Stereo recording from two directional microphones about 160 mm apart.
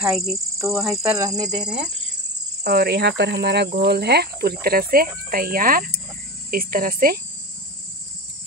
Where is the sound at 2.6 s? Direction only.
80° right.